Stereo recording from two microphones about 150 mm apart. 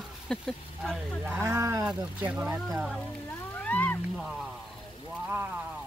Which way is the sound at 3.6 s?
10° left (ahead or behind).